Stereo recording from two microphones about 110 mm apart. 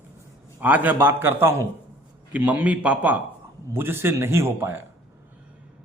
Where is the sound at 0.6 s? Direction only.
15° right (ahead or behind).